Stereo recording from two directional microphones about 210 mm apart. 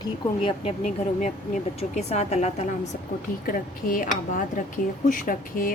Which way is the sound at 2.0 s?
30° left (ahead or behind).